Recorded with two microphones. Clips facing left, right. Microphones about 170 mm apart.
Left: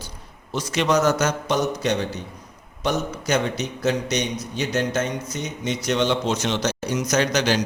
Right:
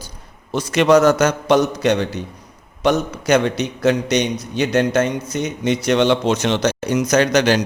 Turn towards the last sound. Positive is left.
turn(degrees=-60)  # may be behind; listen again after turning